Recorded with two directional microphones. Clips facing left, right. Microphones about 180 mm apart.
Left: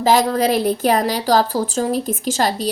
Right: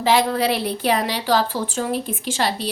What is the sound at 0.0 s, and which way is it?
A woman's voice, 40° left (ahead or behind).